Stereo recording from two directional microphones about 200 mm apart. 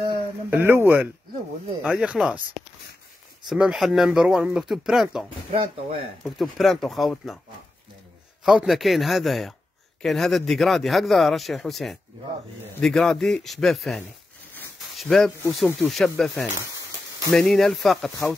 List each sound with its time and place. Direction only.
0.5 s speech: 10° right (ahead or behind)
5.5 s speech: 25° right (ahead or behind)
6.2 s speech: centre (ahead or behind)
8.5 s speech: centre (ahead or behind)
14.5 s a sound: centre (ahead or behind)
15.4 s speech: 5° left (ahead or behind)